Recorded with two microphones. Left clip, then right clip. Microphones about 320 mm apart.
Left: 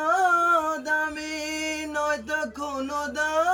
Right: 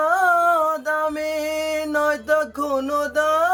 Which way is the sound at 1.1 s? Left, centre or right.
Centre.